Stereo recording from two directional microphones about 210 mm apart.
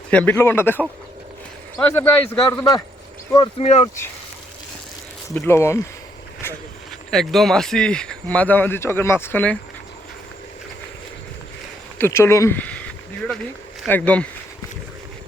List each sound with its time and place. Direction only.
0.1 s a man's voice: 5° left (ahead or behind)
3.3 s speech: 25° left (ahead or behind)
5.3 s a man's voice: 10° left (ahead or behind)
7.1 s speech: centre (ahead or behind)
11.9 s a man's voice: 10° left (ahead or behind)